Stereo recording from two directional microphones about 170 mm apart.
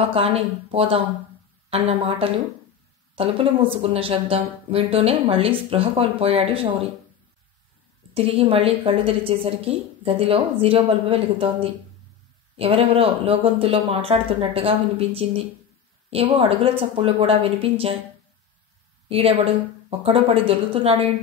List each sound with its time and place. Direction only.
0.1 s a woman's voice: 35° right (ahead or behind)
8.1 s a woman's voice: 35° right (ahead or behind)
19.0 s a woman's voice: 35° right (ahead or behind)